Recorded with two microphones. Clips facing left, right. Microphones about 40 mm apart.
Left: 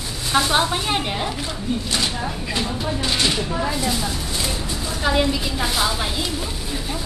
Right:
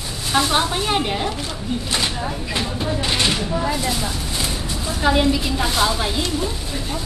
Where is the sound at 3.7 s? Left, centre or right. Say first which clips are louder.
Right 1 dB; centre.